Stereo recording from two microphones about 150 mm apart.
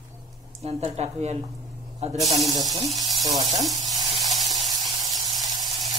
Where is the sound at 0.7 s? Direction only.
40° right (ahead or behind).